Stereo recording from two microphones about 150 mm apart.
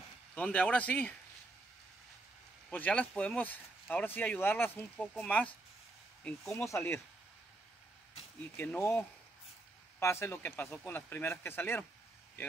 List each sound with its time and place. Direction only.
0.3 s speech: 10° left (ahead or behind)
2.7 s speech: 10° left (ahead or behind)
6.5 s speech: 20° left (ahead or behind)
8.5 s speech: 15° left (ahead or behind)